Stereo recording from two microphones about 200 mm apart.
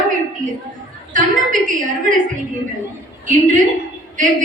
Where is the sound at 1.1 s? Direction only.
40° right (ahead or behind).